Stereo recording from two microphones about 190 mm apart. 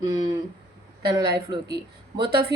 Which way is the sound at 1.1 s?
20° right (ahead or behind).